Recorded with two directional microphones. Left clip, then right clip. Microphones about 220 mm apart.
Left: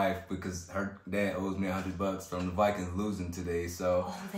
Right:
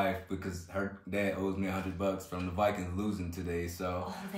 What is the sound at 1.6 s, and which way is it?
A man's voice, 10° left (ahead or behind).